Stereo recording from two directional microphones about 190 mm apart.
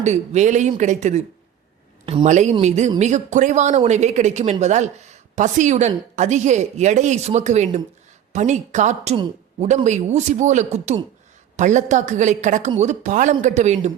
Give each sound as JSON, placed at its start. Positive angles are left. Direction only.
{"t": 0.0, "sound": "speech", "side_deg": -40}
{"t": 2.2, "sound": "speech", "side_deg": -40}